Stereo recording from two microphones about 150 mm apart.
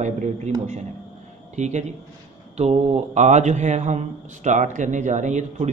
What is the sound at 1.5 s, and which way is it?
A man's voice, 50° right (ahead or behind).